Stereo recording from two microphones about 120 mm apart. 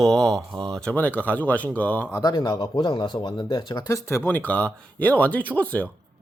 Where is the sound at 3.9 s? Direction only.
20° left (ahead or behind).